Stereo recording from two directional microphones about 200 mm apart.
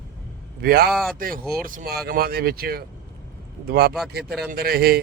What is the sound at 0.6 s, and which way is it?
Speech, 50° right (ahead or behind).